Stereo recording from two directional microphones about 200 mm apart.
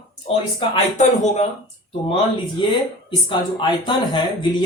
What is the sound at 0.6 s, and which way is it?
Speech, 25° left (ahead or behind).